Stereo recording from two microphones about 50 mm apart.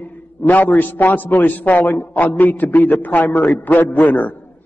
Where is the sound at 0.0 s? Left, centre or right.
Left.